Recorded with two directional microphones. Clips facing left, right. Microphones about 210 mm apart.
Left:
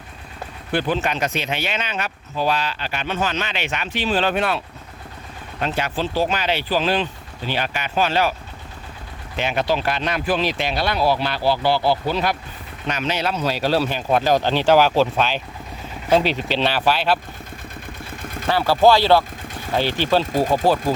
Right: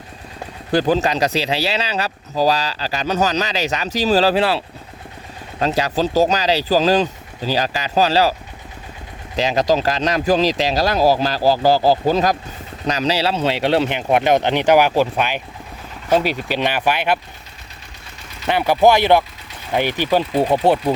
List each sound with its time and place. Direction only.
0.7 s speech: 40° right (ahead or behind); by 17.2 s 15° right (ahead or behind)
18.2 s a sound: 50° left (ahead or behind)
18.4 s speech: 20° right (ahead or behind)
20.6 s speech: 25° right (ahead or behind)